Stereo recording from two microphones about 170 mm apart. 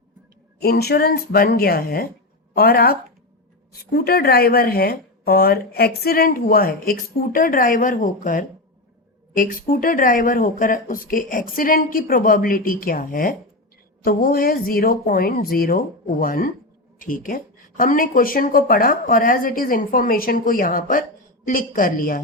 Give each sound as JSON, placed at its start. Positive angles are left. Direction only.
{"t": 0.6, "sound": "speech", "side_deg": 70}